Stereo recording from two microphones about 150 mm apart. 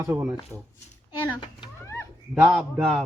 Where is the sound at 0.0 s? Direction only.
15° right (ahead or behind).